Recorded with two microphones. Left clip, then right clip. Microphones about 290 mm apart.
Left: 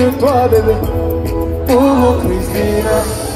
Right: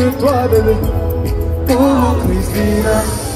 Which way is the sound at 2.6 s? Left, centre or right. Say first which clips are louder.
Left 1 dB; left.